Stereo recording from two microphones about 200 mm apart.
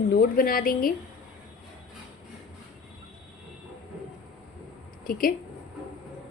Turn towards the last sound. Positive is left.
turn(degrees=45)  # may be behind; listen again after turning